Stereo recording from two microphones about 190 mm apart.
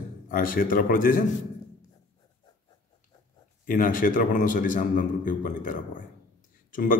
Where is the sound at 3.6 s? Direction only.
45° left (ahead or behind).